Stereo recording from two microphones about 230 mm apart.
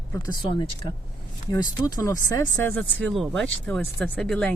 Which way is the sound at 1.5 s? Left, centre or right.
Centre.